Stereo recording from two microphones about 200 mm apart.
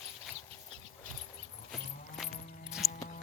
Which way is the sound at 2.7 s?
5° right (ahead or behind).